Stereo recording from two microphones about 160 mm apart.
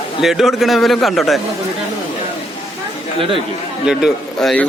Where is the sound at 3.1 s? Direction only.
35° right (ahead or behind).